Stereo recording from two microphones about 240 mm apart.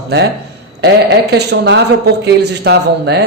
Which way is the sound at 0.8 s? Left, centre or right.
Right.